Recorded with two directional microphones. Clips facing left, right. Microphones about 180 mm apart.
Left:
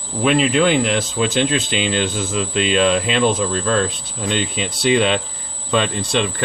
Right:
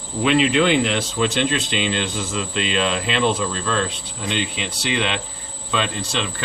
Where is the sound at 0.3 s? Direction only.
45° left (ahead or behind).